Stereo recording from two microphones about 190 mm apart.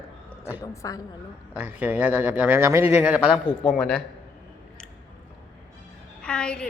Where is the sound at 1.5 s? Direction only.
10° right (ahead or behind).